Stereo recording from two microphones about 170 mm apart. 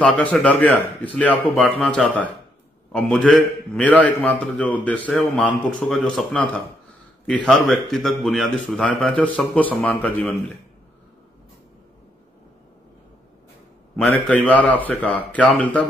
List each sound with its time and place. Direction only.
0.0 s a man's voice: 5° left (ahead or behind)
14.3 s a man's voice: 10° left (ahead or behind)